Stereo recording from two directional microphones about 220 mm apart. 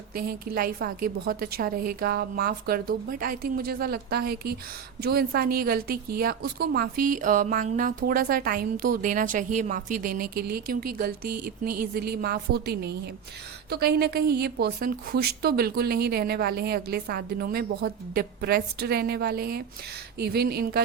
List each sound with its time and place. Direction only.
0.1 s a woman's voice: 45° right (ahead or behind)